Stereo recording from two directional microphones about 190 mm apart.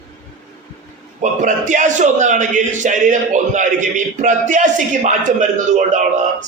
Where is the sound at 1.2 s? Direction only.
40° right (ahead or behind).